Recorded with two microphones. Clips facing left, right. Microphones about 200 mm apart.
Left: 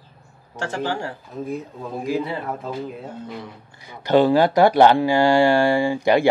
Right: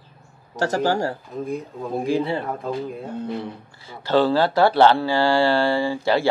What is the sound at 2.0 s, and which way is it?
Speech, 30° right (ahead or behind).